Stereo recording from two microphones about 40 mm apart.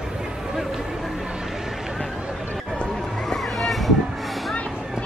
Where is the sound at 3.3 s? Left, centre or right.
Centre.